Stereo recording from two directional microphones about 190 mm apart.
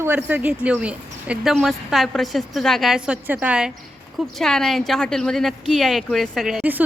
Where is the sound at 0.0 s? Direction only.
10° right (ahead or behind).